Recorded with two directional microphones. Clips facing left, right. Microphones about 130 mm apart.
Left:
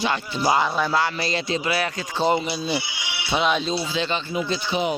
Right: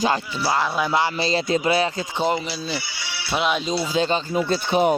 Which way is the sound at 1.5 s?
45° right (ahead or behind).